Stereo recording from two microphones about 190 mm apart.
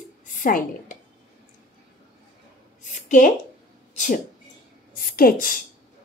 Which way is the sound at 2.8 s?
40° left (ahead or behind).